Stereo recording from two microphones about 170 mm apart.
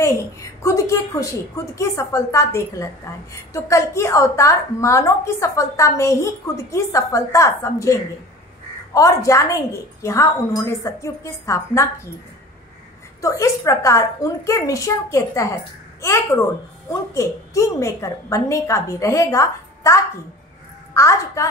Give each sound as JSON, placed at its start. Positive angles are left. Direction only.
{"t": 0.0, "sound": "a woman's voice", "side_deg": 20}
{"t": 8.9, "sound": "a woman's voice", "side_deg": 20}
{"t": 13.2, "sound": "a woman's voice", "side_deg": 20}